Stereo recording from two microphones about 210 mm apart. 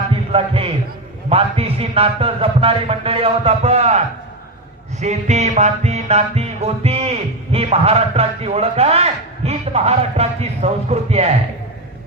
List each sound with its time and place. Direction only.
0.3 s a man's voice: 25° right (ahead or behind)
1.3 s music: 30° right (ahead or behind)